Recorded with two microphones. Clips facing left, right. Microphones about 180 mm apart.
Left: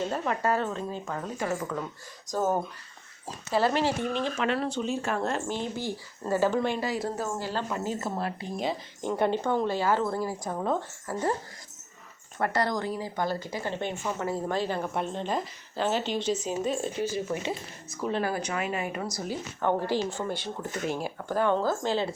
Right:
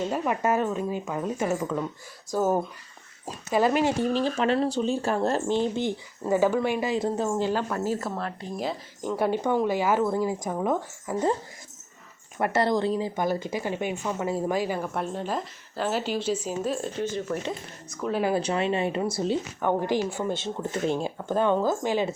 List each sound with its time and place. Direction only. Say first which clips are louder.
0.1 s speech: right 2 dB; 15° right (ahead or behind)
2.3 s speech: right 3 dB; 10° right (ahead or behind)
4.1 s speech: right 4 dB; 35° right (ahead or behind)
8.1 s speech: even; 10° left (ahead or behind)
9.1 s a woman's voice: right 2 dB; 5° right (ahead or behind)
12.4 s a woman's voice: right 4 dB; 25° right (ahead or behind); by 17.5 s 5° left (ahead or behind)
18.1 s speech: right 4 dB; 15° right (ahead or behind)
18.3 s speech: right 6 dB; 30° right (ahead or behind)
19.6 s speech: right 1 dB; 15° right (ahead or behind)